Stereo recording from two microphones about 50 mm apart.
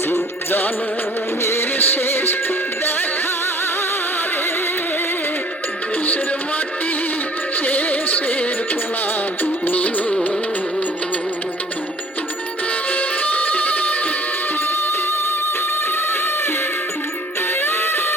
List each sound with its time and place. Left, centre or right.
0.1 s music: left
1.4 s music: left
7.6 s music: left
12.9 s music: left
17.6 s music: left